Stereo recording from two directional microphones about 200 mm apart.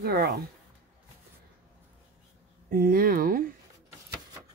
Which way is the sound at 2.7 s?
45° right (ahead or behind).